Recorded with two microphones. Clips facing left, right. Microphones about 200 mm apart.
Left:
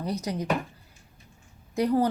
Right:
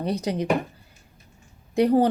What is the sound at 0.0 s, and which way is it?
Speech, 30° right (ahead or behind).